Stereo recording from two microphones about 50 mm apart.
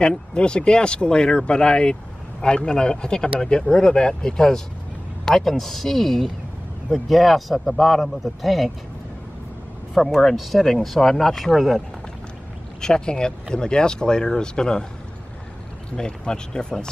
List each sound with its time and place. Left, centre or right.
0.0 s speech: centre
9.9 s speech: centre
12.8 s speech: centre
16.0 s speech: centre